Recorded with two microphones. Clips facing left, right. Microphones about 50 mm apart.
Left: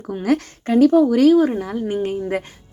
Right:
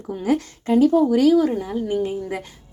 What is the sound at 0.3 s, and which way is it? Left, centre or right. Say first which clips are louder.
Speech: left 1 dB; left.